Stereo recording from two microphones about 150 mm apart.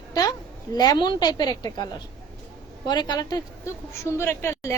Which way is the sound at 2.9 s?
30° left (ahead or behind).